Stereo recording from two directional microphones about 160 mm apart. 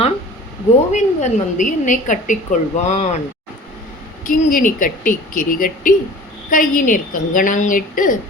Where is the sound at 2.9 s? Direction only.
45° left (ahead or behind).